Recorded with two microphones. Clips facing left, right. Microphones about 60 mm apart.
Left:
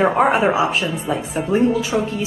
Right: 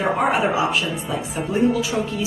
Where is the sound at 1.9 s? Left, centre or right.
Left.